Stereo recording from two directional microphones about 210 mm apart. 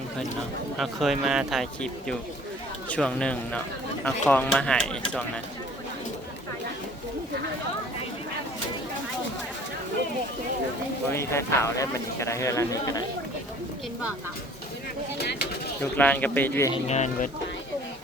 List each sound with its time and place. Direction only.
0.8 s speech: centre (ahead or behind)
11.1 s speech: 15° left (ahead or behind)
15.2 s speech: 50° left (ahead or behind)
15.8 s speech: 10° left (ahead or behind)
16.9 s speech: 35° left (ahead or behind)